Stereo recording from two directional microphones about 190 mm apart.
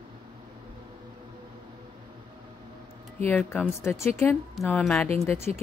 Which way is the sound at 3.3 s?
10° left (ahead or behind).